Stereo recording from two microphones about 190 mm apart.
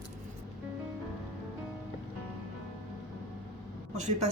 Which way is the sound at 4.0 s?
40° right (ahead or behind).